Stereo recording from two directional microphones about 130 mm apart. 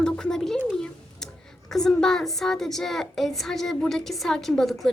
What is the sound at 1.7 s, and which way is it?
A woman's voice, 5° left (ahead or behind).